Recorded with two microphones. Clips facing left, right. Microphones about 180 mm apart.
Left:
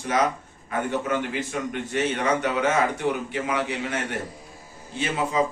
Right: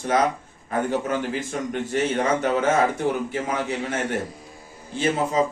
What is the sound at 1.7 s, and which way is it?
Speech, 35° right (ahead or behind).